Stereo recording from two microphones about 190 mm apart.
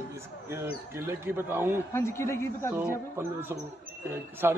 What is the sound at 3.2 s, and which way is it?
Speech, 10° right (ahead or behind).